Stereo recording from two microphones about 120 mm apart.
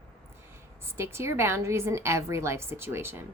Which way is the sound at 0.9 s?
20° right (ahead or behind).